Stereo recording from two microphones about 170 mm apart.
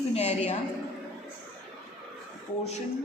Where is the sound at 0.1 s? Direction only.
40° left (ahead or behind).